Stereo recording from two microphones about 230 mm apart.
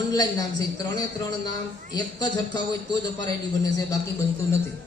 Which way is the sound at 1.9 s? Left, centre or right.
Centre.